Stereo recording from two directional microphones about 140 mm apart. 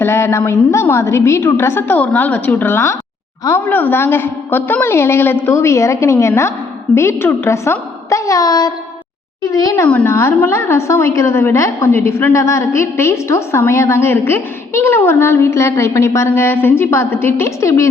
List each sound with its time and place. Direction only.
0.0 s a woman's voice: 20° left (ahead or behind)